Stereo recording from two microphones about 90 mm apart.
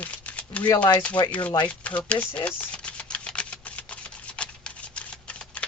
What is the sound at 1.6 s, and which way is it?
Typewriter, 15° left (ahead or behind).